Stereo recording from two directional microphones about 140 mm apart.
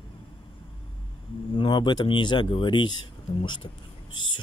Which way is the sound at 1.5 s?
35° left (ahead or behind).